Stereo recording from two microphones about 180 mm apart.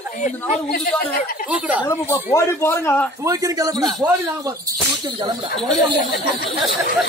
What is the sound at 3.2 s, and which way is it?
Speech, 20° right (ahead or behind).